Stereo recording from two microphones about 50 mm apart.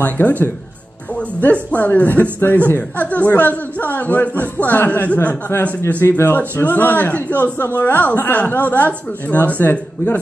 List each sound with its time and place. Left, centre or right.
0.0 s speech: left
6.0 s speech: left
6.3 s speech: left